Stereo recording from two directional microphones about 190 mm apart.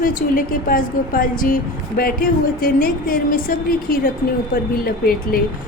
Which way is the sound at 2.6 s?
50° left (ahead or behind).